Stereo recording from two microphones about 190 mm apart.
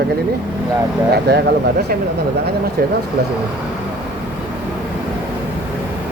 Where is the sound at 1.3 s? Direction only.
60° right (ahead or behind).